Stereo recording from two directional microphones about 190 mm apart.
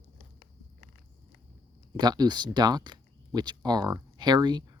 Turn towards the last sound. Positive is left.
turn(degrees=-20)  # may be behind; listen again after turning